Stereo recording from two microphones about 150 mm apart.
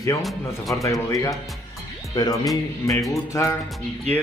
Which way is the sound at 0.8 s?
20° left (ahead or behind).